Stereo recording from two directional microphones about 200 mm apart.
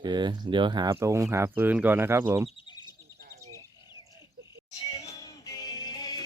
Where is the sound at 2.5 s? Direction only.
20° left (ahead or behind).